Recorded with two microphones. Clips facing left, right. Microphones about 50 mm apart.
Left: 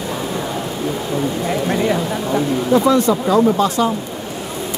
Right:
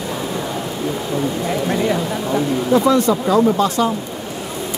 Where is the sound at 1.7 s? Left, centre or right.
Left.